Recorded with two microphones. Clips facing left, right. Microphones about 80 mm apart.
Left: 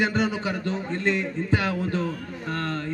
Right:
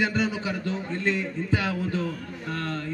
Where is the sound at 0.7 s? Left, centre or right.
Left.